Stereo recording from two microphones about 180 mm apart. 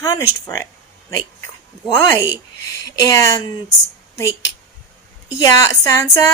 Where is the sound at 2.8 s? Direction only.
20° left (ahead or behind).